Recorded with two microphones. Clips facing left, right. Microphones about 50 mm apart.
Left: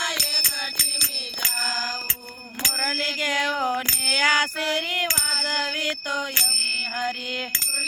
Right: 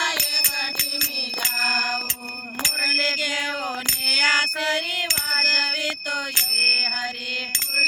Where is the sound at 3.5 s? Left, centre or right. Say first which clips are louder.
Left 3 dB; left.